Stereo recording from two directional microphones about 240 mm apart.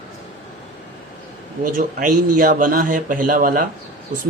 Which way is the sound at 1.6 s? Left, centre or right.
Right.